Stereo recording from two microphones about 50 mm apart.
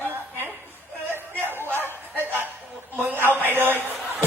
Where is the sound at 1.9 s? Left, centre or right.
Left.